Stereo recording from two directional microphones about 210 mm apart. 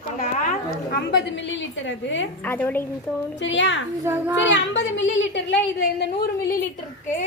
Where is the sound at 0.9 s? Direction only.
55° left (ahead or behind).